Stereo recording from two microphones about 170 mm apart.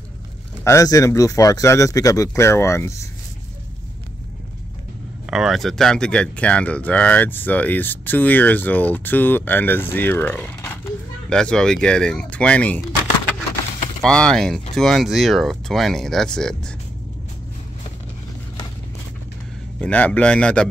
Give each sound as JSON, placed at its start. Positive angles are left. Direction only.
{"t": 0.7, "sound": "speech", "side_deg": 20}
{"t": 5.3, "sound": "speech", "side_deg": 0}
{"t": 14.0, "sound": "speech", "side_deg": 5}
{"t": 19.8, "sound": "speech", "side_deg": 5}